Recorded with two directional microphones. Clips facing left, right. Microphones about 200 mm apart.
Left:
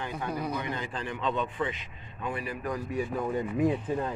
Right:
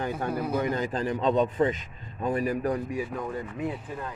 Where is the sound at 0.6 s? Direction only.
40° right (ahead or behind).